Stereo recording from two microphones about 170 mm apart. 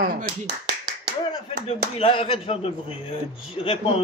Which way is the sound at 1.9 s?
30° left (ahead or behind).